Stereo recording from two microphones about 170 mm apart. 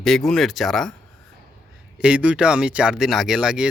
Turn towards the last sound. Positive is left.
turn(degrees=-5)  # may be behind; listen again after turning